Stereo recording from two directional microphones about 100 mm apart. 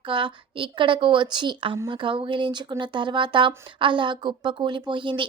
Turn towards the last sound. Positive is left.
turn(degrees=-55)  # may be behind; listen again after turning